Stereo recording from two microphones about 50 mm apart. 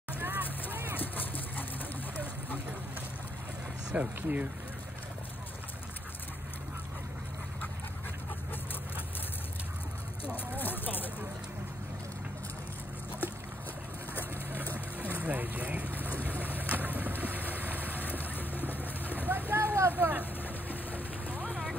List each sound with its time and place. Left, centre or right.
0.2 s boat: right
1.1 s dog: left
3.9 s speech: right
10.3 s a sound: left
15.1 s vehicle: right
18.0 s vehicle: left
19.0 s a sound: right
19.9 s vehicle: right
20.9 s vehicle: left